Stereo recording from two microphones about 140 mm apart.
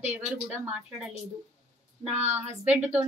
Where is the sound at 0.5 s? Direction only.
10° right (ahead or behind).